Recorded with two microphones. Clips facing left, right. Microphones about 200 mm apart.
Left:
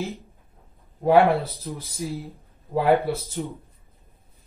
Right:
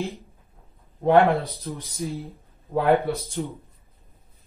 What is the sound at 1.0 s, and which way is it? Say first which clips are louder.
Speech: even; centre (ahead or behind).